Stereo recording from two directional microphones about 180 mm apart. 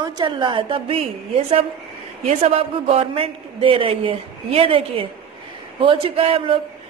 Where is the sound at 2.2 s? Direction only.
35° right (ahead or behind).